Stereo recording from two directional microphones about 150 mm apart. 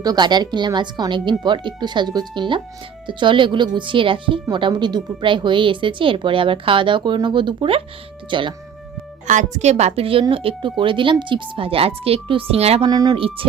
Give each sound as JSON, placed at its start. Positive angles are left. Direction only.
{"t": 0.0, "sound": "a woman's voice", "side_deg": -25}
{"t": 9.2, "sound": "speech", "side_deg": -55}
{"t": 12.9, "sound": "speech", "side_deg": -25}